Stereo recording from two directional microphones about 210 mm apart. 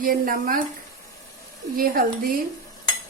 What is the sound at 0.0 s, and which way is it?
Speech, 40° right (ahead or behind).